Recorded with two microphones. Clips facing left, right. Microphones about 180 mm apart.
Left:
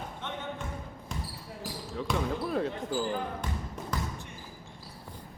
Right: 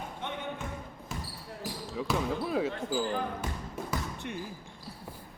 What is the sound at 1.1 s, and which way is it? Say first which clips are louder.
Basketball bounce: even; 5° right (ahead or behind).